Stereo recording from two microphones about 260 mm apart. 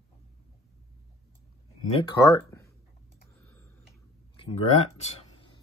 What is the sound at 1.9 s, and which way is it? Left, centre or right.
Speech, centre.